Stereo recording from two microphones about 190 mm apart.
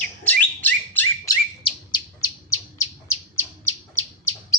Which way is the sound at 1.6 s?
25° left (ahead or behind).